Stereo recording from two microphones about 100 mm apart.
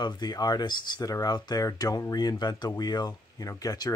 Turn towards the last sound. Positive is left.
turn(degrees=40)  # may be behind; listen again after turning